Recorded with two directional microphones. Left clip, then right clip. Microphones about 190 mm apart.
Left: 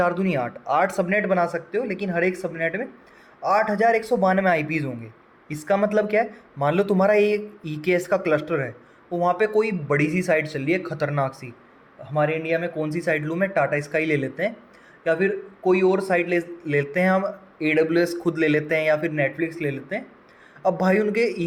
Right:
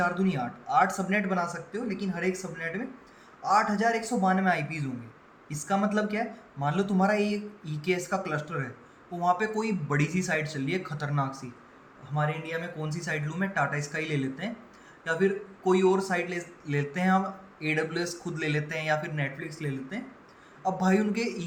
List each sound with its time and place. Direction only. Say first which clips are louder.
0.0 s speech: left 6 dB; 45° left (ahead or behind)
12.5 s speech: left 10 dB; 40° left (ahead or behind)
20.6 s speech: left 7 dB; 45° left (ahead or behind)